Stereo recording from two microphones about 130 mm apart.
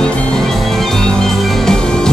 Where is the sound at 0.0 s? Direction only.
5° left (ahead or behind).